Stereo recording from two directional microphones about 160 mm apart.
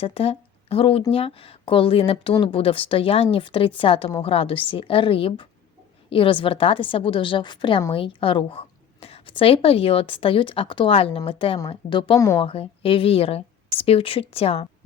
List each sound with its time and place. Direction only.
0.0 s a woman's voice: 35° left (ahead or behind)